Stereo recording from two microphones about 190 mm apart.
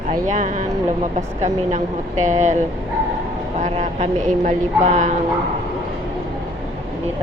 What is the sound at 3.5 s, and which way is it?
Speech, 40° right (ahead or behind).